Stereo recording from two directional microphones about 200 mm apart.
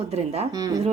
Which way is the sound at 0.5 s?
20° right (ahead or behind).